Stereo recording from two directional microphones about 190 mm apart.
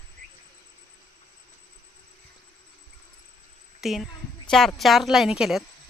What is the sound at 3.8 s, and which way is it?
Speech, centre (ahead or behind).